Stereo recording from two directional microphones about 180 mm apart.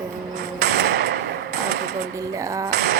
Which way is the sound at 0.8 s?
65° right (ahead or behind).